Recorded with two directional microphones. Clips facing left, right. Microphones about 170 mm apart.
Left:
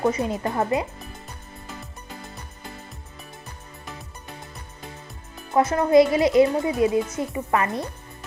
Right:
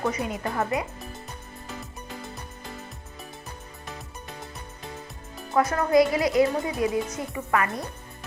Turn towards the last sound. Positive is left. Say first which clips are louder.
# left 3 dB
turn(degrees=25)  # may be behind; listen again after turning